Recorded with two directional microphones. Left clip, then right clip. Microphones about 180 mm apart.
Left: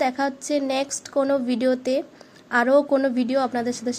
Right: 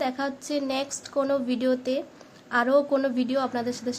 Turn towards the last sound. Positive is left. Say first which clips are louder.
# left 3 dB
turn(degrees=20)  # may be behind; listen again after turning